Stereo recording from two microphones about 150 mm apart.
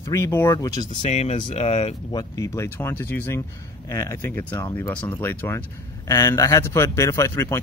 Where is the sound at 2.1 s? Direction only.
25° left (ahead or behind).